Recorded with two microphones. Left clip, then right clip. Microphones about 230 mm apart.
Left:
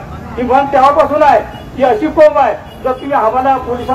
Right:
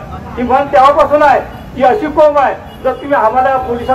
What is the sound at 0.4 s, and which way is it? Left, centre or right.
Speech, right.